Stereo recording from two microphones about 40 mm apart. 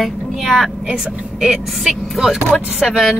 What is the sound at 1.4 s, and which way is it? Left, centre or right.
Speech, centre.